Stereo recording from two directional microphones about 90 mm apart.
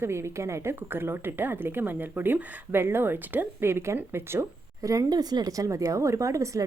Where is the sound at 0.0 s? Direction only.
30° right (ahead or behind).